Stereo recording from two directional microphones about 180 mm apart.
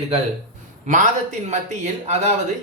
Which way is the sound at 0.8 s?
45° right (ahead or behind).